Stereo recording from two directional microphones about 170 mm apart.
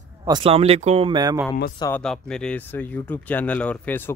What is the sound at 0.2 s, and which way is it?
A man's voice, 30° right (ahead or behind).